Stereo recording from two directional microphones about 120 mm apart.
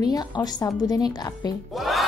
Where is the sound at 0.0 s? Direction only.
35° left (ahead or behind).